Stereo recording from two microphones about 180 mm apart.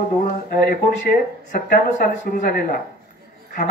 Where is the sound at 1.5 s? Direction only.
50° left (ahead or behind).